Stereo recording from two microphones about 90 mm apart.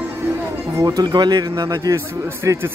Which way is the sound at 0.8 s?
45° right (ahead or behind).